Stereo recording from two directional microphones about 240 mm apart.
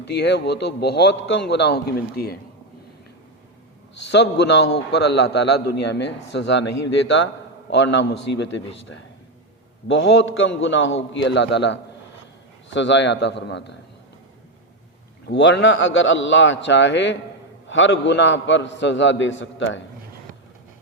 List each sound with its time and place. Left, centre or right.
0.0 s a man's voice: left
4.1 s a man's voice: left
15.3 s a man's voice: left